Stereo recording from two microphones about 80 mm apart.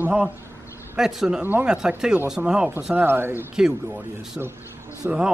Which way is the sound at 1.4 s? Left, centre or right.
Right.